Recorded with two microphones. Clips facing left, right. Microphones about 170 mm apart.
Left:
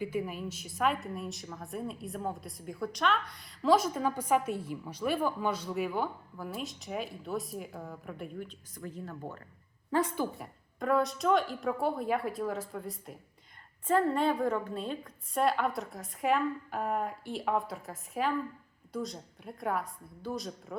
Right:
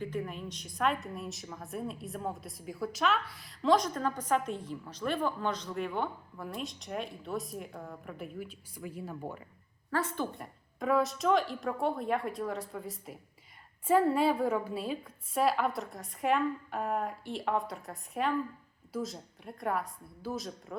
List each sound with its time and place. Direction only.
0.0 s a woman's voice: 10° left (ahead or behind); by 9.4 s 10° right (ahead or behind)
9.9 s a woman's voice: 15° left (ahead or behind)
10.3 s a woman's voice: centre (ahead or behind)